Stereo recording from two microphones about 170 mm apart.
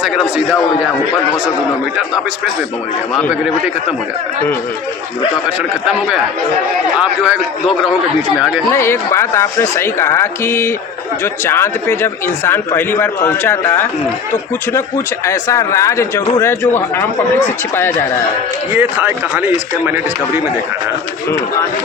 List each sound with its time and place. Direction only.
0.0 s a man's voice: 5° right (ahead or behind)
7.0 s a man's voice: 5° right (ahead or behind)
8.7 s speech: 15° left (ahead or behind)
15.3 s speech: 15° left (ahead or behind)
18.7 s speech: 15° right (ahead or behind)